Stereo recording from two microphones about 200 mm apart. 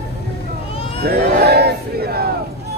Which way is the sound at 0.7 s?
30° left (ahead or behind).